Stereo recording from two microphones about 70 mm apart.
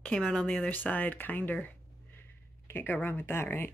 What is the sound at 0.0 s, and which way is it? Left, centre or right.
Speech, centre.